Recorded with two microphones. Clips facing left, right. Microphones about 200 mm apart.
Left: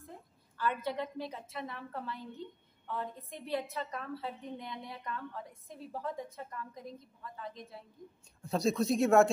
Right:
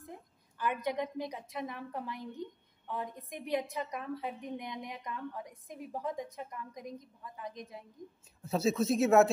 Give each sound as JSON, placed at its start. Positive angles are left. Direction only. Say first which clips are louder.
{"t": 0.0, "sound": "a woman's voice", "louder": "right 2 dB", "side_deg": -15}
{"t": 8.4, "sound": "speech", "louder": "right 1 dB", "side_deg": -5}